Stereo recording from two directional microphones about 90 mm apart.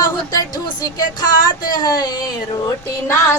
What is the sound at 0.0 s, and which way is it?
Music, 50° left (ahead or behind).